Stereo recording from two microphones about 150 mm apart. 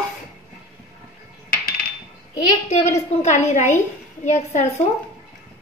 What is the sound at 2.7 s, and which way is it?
A woman's voice, 45° left (ahead or behind).